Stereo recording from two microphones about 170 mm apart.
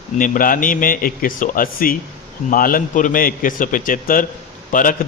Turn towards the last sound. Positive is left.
turn(degrees=50)  # may be behind; listen again after turning